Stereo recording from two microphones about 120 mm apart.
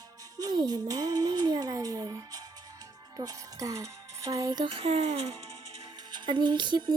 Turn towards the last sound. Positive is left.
turn(degrees=-40)  # may be behind; listen again after turning